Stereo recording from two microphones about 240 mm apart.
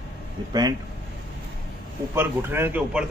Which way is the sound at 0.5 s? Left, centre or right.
Centre.